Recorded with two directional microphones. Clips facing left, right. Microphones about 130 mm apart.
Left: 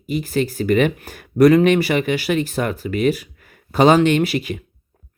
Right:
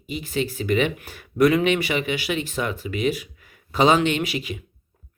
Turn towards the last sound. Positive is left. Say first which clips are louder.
# left 7 dB
turn(degrees=50)  # may be behind; listen again after turning